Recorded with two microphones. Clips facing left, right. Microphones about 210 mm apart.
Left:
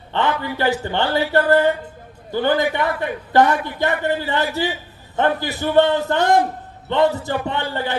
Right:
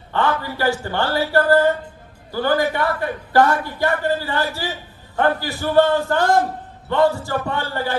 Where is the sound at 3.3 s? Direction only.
20° left (ahead or behind).